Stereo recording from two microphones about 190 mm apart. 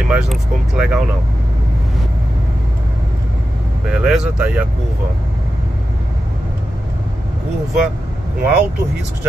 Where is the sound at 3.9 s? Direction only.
5° right (ahead or behind).